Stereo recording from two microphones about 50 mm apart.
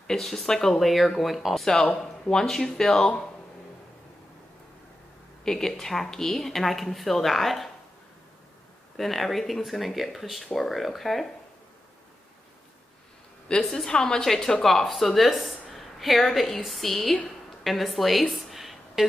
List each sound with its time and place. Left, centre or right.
0.0 s speech: centre
5.4 s speech: centre
8.9 s speech: centre
13.5 s a woman's voice: centre
17.0 s a sound: centre